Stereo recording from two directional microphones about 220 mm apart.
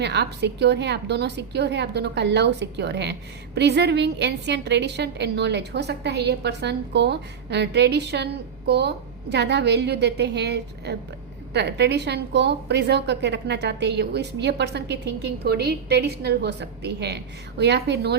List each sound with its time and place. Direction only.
0.0 s a woman's voice: 50° right (ahead or behind)